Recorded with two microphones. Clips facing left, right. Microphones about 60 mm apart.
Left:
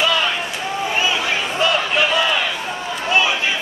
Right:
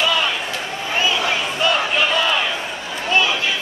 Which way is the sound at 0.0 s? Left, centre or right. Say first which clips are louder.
Left 1 dB; centre.